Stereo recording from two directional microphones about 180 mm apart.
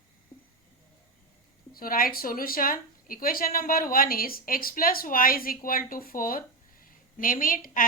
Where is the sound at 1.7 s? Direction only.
50° left (ahead or behind).